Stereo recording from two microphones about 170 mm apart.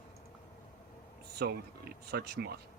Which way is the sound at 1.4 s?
70° right (ahead or behind).